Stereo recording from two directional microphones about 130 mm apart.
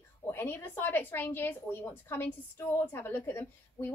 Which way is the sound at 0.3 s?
15° left (ahead or behind).